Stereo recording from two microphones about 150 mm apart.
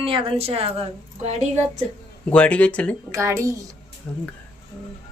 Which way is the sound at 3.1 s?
20° right (ahead or behind).